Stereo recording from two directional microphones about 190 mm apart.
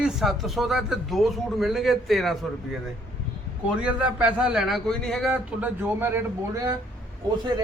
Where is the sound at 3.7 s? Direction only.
5° right (ahead or behind).